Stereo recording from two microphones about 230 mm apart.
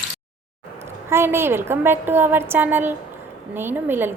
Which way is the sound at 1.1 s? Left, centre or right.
Centre.